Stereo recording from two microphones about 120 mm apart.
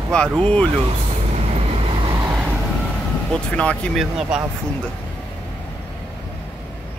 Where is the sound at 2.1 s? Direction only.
35° right (ahead or behind).